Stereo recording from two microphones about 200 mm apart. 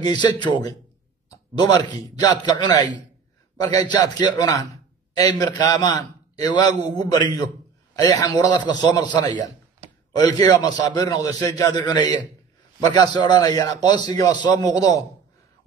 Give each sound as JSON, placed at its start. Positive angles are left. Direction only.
{"t": 0.0, "sound": "a man's voice", "side_deg": 20}
{"t": 3.8, "sound": "a man's voice", "side_deg": 20}
{"t": 10.1, "sound": "a man's voice", "side_deg": 20}